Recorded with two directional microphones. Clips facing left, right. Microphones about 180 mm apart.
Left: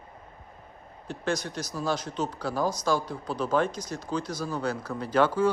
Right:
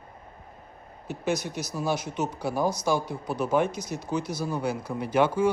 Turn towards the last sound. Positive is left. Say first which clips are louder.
# right 1 dB
turn(degrees=-10)  # may be behind; listen again after turning